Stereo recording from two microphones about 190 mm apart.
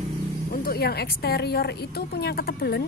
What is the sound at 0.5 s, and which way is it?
A woman's voice, 50° left (ahead or behind).